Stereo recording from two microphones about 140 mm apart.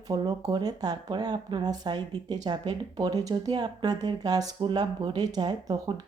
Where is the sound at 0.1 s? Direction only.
30° right (ahead or behind).